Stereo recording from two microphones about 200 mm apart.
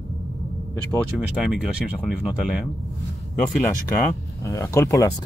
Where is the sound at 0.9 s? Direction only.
5° right (ahead or behind).